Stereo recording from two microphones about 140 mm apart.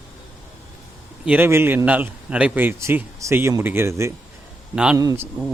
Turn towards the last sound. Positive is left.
turn(degrees=-25)  # may be behind; listen again after turning